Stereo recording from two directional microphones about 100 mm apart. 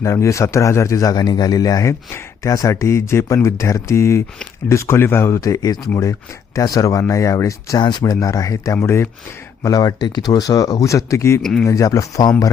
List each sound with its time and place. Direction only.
0.0 s speech: 30° left (ahead or behind)
7.8 s speech: 45° left (ahead or behind); by 9.0 s 25° left (ahead or behind)
9.6 s speech: 40° left (ahead or behind)